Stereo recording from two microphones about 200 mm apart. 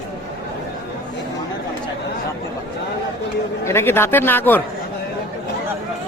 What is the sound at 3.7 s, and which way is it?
Speech, 10° left (ahead or behind).